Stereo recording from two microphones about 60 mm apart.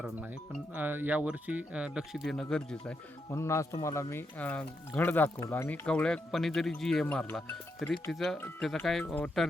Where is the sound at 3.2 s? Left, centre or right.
Left.